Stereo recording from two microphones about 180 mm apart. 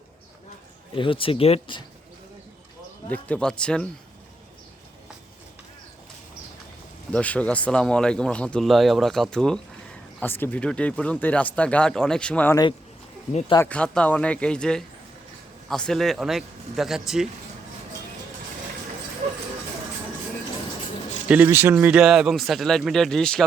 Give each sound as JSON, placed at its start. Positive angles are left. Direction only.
{"t": 0.9, "sound": "speech", "side_deg": 30}
{"t": 3.1, "sound": "speech", "side_deg": 5}
{"t": 7.1, "sound": "speech", "side_deg": 5}
{"t": 13.7, "sound": "speech", "side_deg": 5}
{"t": 21.2, "sound": "speech", "side_deg": -10}